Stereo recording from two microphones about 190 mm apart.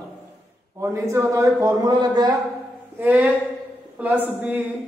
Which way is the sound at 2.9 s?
10° right (ahead or behind).